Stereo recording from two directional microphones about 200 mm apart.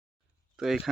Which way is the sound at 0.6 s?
Centre (ahead or behind).